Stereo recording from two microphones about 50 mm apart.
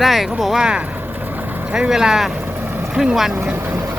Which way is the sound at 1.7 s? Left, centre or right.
Centre.